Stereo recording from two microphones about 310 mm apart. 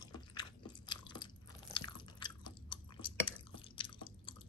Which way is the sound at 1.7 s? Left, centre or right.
Centre.